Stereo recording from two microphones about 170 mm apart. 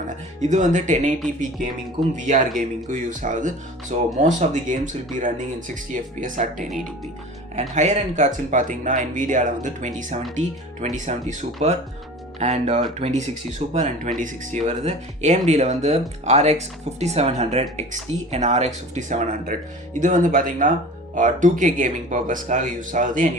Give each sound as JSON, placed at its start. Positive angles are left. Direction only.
{"t": 0.1, "sound": "speech", "side_deg": -45}
{"t": 2.6, "sound": "speech", "side_deg": -50}